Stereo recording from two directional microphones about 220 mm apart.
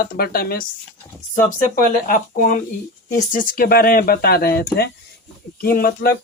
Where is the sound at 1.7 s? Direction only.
40° left (ahead or behind).